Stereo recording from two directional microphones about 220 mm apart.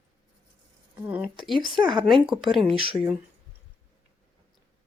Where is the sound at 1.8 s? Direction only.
20° right (ahead or behind).